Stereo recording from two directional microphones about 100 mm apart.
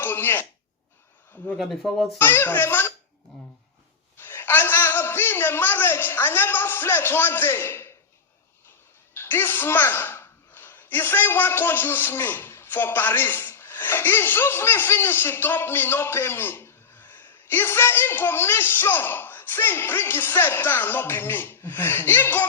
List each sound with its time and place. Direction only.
0.0 s throat clearing: 25° left (ahead or behind)
1.5 s speech: centre (ahead or behind)
2.1 s a man's voice: 25° left (ahead or behind)
4.2 s a man's voice: 20° left (ahead or behind)
9.1 s speech: 25° left (ahead or behind)